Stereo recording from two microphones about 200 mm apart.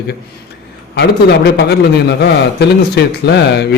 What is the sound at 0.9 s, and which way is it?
A man's voice, 55° left (ahead or behind).